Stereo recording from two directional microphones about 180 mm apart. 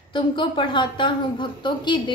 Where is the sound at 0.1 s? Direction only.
25° left (ahead or behind).